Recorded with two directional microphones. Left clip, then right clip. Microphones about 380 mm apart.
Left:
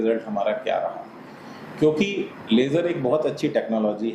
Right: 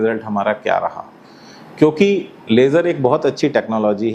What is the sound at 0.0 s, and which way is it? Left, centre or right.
Speech, right.